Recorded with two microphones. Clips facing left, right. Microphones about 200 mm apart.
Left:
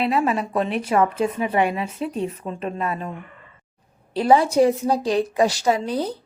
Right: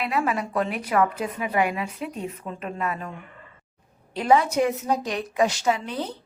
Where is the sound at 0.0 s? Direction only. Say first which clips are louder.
Left 4 dB; 25° left (ahead or behind).